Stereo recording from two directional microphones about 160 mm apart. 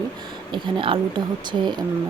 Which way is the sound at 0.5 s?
30° right (ahead or behind).